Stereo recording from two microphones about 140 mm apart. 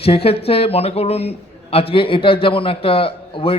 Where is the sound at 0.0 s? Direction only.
45° left (ahead or behind).